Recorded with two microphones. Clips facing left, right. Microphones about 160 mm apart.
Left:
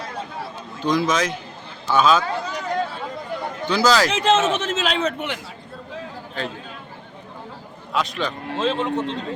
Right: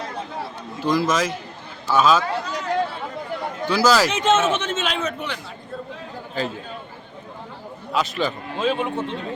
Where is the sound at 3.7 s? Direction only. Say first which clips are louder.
Even; 5° right (ahead or behind).